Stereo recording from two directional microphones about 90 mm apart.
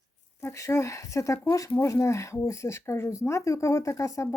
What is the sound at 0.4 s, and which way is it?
Speech, 35° left (ahead or behind).